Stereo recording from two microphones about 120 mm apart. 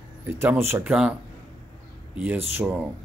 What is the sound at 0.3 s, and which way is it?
Speech, 20° right (ahead or behind).